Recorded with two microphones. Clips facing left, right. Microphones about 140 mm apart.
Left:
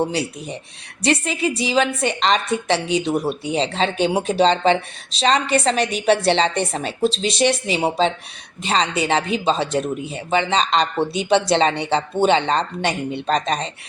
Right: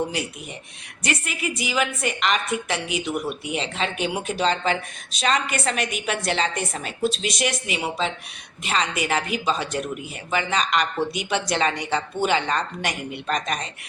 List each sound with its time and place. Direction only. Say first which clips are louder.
0.0 s a woman's voice: left 5 dB; 30° left (ahead or behind)